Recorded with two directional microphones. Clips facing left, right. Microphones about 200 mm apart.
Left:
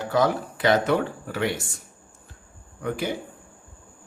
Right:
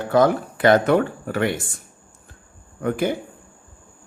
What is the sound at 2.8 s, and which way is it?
Speech, 50° right (ahead or behind).